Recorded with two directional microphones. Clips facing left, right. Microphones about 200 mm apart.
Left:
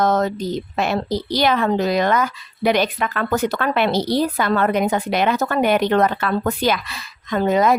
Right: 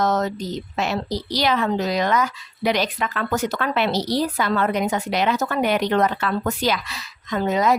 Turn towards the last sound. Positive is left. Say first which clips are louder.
# left 3 dB
turn(degrees=55)  # may be behind; listen again after turning